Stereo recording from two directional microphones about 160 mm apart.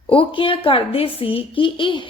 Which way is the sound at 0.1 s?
35° left (ahead or behind).